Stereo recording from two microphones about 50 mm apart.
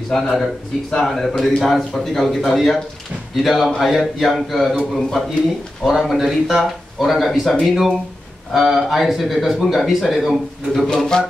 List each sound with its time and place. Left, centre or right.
0.1 s speech: centre
11.1 s music: centre